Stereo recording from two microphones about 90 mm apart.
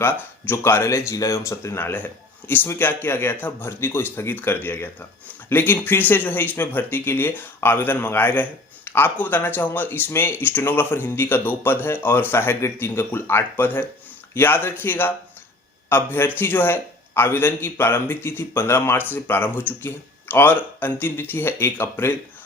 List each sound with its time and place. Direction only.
0.0 s speech: 25° left (ahead or behind)